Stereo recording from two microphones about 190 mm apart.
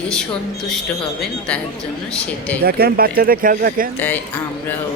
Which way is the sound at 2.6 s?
50° right (ahead or behind).